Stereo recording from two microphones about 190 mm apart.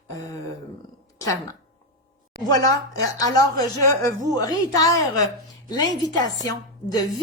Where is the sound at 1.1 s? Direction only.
15° left (ahead or behind).